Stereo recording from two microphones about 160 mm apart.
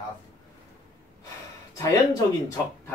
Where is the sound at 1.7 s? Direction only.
20° left (ahead or behind).